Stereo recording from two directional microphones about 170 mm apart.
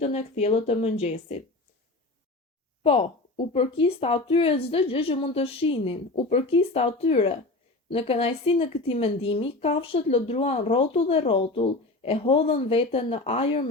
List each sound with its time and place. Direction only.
0.0 s a woman's voice: 35° left (ahead or behind)
2.8 s a woman's voice: 35° left (ahead or behind)